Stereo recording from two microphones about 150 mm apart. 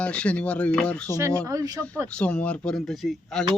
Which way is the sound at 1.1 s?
20° right (ahead or behind).